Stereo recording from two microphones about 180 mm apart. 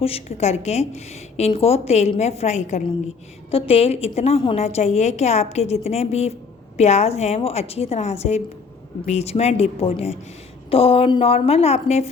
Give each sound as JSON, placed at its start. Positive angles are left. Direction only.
{"t": 0.0, "sound": "a woman's voice", "side_deg": 35}